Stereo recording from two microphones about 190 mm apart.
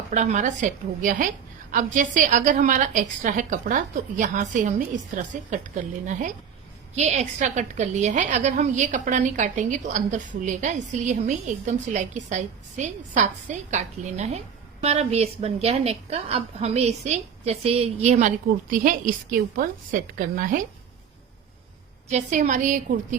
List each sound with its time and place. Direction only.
0.1 s a woman's voice: 40° right (ahead or behind)
22.1 s a woman's voice: 40° right (ahead or behind)